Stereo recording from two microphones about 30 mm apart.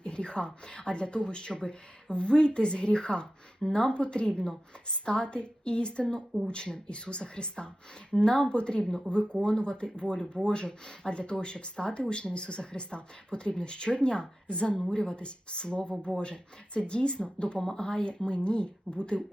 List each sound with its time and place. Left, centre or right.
0.0 s speech: left
10.7 s speech: left
11.1 s speech: left